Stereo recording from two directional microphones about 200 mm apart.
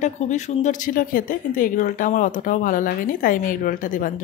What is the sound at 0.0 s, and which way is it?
A woman's voice, 35° left (ahead or behind).